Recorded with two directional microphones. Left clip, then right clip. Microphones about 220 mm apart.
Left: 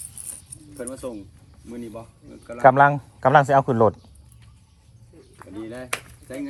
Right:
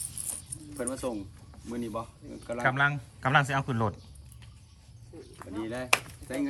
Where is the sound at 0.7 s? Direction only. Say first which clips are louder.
Left 1 dB; centre (ahead or behind).